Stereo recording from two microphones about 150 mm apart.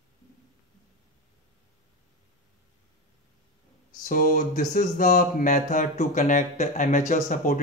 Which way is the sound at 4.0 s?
65° left (ahead or behind).